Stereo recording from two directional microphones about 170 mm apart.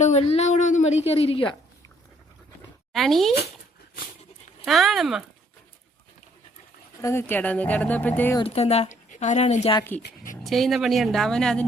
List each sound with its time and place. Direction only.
0.0 s a woman's voice: 40° left (ahead or behind)
2.9 s speech: centre (ahead or behind)
4.6 s speech: centre (ahead or behind)
7.0 s speech: 15° left (ahead or behind)
8.4 s a woman's voice: 35° left (ahead or behind)
10.4 s speech: centre (ahead or behind)